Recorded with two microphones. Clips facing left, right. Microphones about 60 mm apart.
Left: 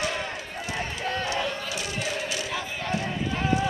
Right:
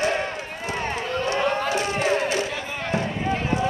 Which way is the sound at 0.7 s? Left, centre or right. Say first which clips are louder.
Right 3 dB; right.